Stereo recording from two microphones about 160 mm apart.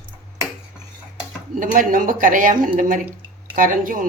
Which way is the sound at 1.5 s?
55° right (ahead or behind).